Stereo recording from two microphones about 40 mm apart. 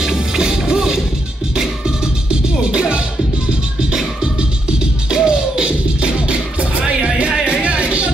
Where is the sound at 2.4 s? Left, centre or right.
Right.